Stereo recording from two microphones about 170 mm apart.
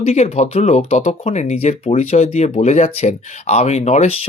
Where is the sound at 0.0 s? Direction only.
40° left (ahead or behind).